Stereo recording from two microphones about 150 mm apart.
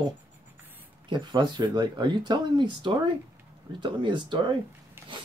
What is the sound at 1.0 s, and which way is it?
Speech, 30° right (ahead or behind).